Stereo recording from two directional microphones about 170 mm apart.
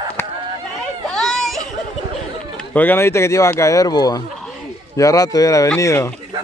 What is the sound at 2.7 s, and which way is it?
A man's voice, 10° left (ahead or behind).